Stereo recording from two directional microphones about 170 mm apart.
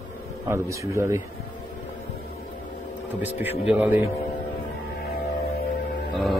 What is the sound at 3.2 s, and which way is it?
Speech, 10° right (ahead or behind).